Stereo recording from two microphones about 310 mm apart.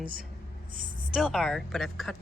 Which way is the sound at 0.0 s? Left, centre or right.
Right.